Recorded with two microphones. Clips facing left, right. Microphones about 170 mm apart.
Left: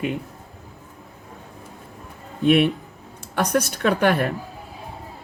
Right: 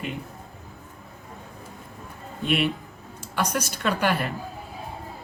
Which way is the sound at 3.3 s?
55° left (ahead or behind).